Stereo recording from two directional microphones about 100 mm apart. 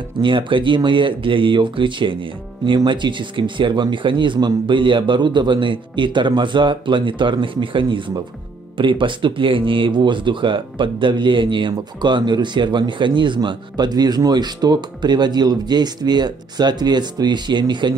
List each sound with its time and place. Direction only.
0.2 s speech: 55° right (ahead or behind)